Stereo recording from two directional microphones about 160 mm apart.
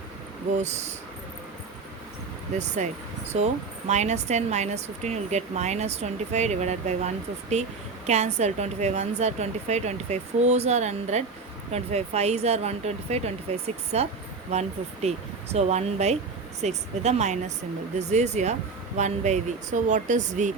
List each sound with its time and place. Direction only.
0.5 s speech: 45° right (ahead or behind)
2.6 s speech: 45° right (ahead or behind)